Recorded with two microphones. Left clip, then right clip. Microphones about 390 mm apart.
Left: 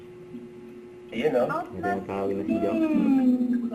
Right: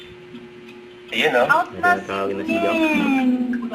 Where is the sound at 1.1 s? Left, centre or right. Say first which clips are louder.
Right 8 dB; centre.